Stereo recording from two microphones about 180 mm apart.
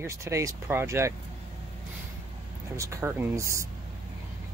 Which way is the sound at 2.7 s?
15° right (ahead or behind).